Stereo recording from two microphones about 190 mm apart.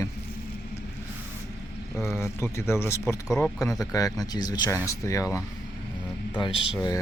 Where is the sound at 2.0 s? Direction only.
15° left (ahead or behind).